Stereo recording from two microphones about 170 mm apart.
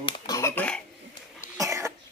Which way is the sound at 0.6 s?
5° left (ahead or behind).